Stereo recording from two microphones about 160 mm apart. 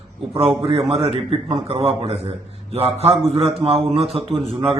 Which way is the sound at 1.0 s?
35° right (ahead or behind).